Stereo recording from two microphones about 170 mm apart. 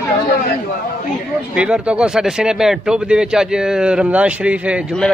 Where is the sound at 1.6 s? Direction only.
5° right (ahead or behind).